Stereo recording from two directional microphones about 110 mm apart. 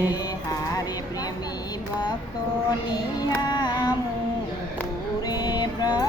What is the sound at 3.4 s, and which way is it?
Child singing, 40° left (ahead or behind).